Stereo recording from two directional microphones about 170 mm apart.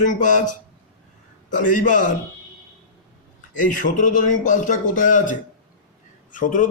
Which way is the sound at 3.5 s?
50° left (ahead or behind).